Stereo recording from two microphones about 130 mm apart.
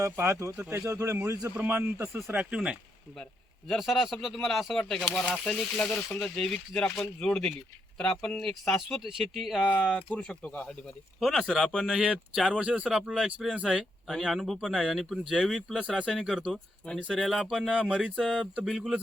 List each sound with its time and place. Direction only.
0.0 s a man's voice: 20° right (ahead or behind); by 9.8 s 5° right (ahead or behind)
9.8 s speech: 10° left (ahead or behind)